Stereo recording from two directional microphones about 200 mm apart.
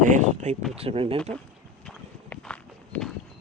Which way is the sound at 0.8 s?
30° right (ahead or behind).